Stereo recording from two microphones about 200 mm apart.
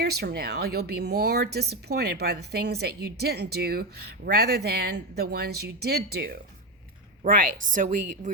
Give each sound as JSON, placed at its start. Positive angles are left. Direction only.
{"t": 0.0, "sound": "a woman's voice", "side_deg": -50}